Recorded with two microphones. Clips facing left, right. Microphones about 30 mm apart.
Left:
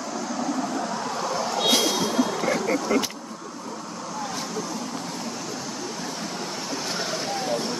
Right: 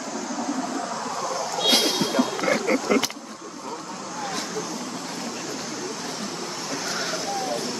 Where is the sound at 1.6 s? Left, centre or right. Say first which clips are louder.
Right 2 dB; right.